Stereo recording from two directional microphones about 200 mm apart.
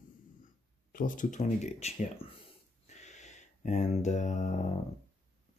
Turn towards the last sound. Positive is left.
turn(degrees=40)  # may be behind; listen again after turning